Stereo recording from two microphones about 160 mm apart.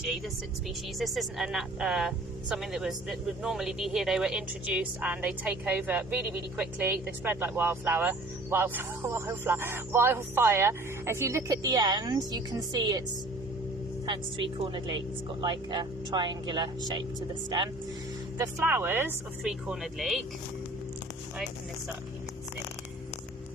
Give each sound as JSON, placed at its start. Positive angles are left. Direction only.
{"t": 0.9, "sound": "speech", "side_deg": 0}
{"t": 14.1, "sound": "a woman's voice", "side_deg": -30}
{"t": 18.3, "sound": "speech", "side_deg": -15}
{"t": 19.5, "sound": "speech", "side_deg": 0}